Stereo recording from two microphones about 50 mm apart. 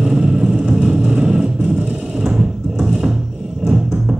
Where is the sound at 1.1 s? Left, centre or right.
Centre.